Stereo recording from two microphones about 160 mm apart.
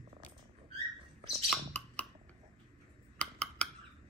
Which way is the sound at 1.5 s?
10° left (ahead or behind).